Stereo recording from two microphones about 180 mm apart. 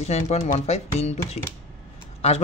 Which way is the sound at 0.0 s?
35° left (ahead or behind).